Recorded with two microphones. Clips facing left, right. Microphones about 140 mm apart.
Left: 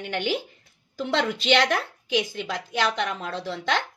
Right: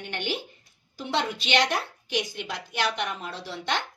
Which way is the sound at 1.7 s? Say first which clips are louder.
Left 4 dB; 90° left.